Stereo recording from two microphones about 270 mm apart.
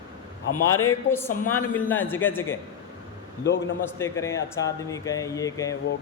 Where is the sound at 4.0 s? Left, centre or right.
Centre.